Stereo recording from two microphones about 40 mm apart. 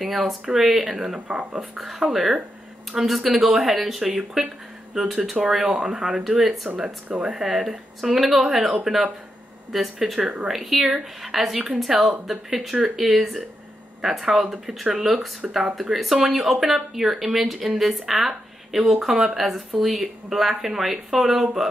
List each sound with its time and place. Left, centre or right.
0.0 s speech: centre; by 1.7 s right
1.8 s speech: centre